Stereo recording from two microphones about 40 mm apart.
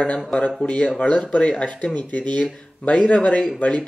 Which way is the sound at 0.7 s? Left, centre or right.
Left.